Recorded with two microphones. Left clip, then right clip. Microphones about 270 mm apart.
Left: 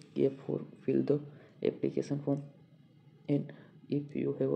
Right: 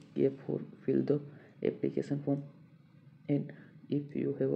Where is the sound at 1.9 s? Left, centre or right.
Left.